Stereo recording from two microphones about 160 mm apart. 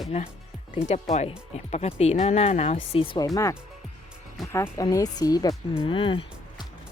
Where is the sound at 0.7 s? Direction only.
45° left (ahead or behind).